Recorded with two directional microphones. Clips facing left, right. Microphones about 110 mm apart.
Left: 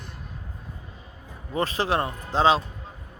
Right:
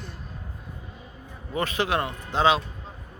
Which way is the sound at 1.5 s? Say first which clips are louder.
Left 1 dB; 35° left (ahead or behind).